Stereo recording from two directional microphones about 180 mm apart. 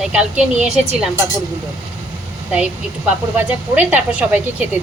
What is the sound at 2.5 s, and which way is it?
Speech, 10° right (ahead or behind).